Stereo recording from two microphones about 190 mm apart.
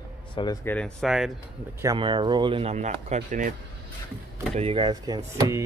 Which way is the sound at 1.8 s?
20° right (ahead or behind).